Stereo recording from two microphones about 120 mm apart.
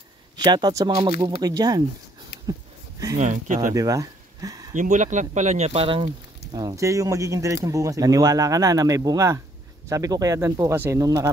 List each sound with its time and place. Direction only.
0.4 s speech: 35° right (ahead or behind)
3.2 s speech: 85° right
3.6 s speech: 30° right (ahead or behind)
4.7 s speech: 90° right
5.7 s speech: 50° right (ahead or behind)
6.5 s speech: 30° right (ahead or behind)